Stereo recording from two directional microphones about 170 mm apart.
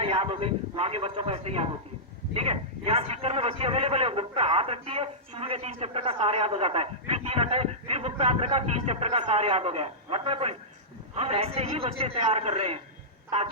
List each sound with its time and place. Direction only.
0.0 s a man's voice: 35° right (ahead or behind)